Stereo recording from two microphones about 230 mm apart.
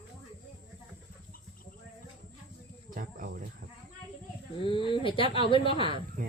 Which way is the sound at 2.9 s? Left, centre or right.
Right.